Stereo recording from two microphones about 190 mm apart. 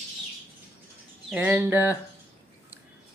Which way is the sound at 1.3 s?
10° right (ahead or behind).